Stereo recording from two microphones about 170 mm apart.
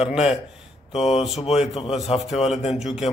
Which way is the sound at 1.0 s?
40° left (ahead or behind).